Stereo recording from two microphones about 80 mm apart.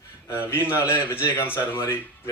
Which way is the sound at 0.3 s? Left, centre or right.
Left.